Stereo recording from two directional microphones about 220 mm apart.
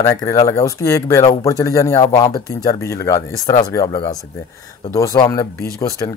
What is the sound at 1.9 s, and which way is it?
Speech, 25° left (ahead or behind).